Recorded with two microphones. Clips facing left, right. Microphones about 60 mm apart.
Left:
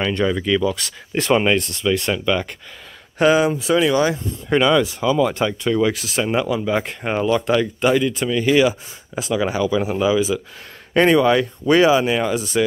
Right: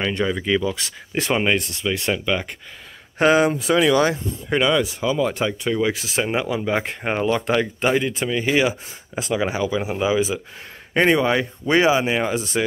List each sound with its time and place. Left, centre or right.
0.0 s speech: centre
0.8 s speech: right
1.1 s speech: centre
3.2 s speech: right
4.5 s speech: centre
4.8 s speech: centre
9.5 s speech: right
10.9 s speech: centre